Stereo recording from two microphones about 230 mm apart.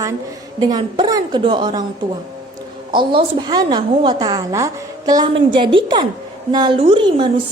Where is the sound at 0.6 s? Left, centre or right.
Centre.